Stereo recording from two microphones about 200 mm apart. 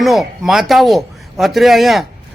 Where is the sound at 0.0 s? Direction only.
Centre (ahead or behind).